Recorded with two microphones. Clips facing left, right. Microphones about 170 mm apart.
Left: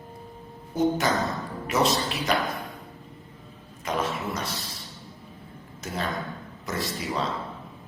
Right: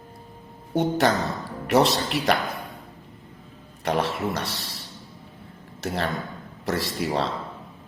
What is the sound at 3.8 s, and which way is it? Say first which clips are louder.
Speech: right 4 dB; 65° right (ahead or behind).